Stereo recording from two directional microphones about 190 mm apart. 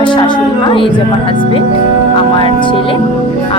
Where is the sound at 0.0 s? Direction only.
25° left (ahead or behind).